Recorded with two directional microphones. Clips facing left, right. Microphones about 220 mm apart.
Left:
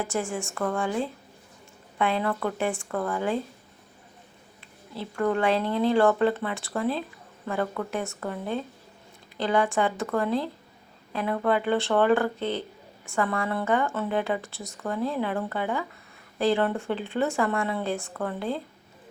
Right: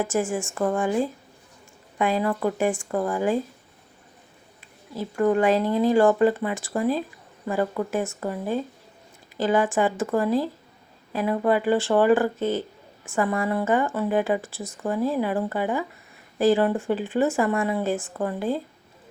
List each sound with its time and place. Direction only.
0.0 s speech: 15° right (ahead or behind)
5.1 s speech: 15° right (ahead or behind)
7.9 s speech: 5° right (ahead or behind)
13.1 s speech: 15° right (ahead or behind)
18.2 s speech: 15° right (ahead or behind)